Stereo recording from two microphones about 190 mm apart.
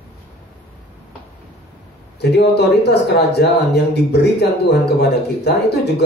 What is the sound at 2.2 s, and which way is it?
Speech, 60° left (ahead or behind).